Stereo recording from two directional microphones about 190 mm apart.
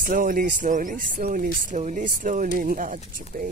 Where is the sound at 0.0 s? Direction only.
45° right (ahead or behind).